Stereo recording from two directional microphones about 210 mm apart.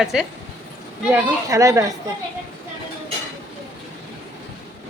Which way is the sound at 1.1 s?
15° right (ahead or behind).